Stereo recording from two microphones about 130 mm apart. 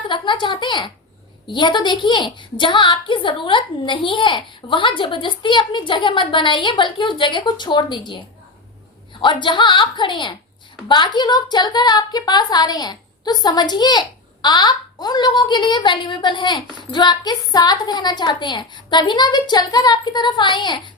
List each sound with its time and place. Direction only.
0.1 s a sound: 40° left (ahead or behind)
1.5 s a woman's voice: 35° left (ahead or behind)
9.2 s a woman's voice: 40° left (ahead or behind)